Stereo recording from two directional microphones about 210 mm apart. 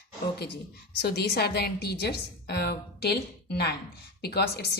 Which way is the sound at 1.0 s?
50° left (ahead or behind).